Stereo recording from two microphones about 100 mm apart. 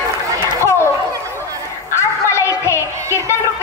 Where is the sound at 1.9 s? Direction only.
25° left (ahead or behind).